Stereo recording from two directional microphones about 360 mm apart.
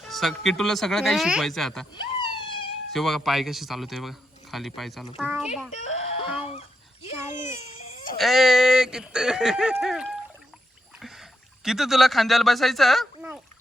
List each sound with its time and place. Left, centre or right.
0.0 s speech: centre
2.1 s a sound: centre
2.9 s speech: centre
5.7 s screaming: centre
6.5 s a sound: centre
7.3 s baby cry: centre
8.2 s speech: centre